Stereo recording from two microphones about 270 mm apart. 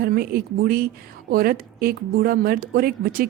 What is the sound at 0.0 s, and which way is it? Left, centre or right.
Speech, right.